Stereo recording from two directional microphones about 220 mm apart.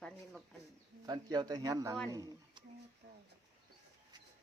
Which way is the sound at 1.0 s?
20° right (ahead or behind).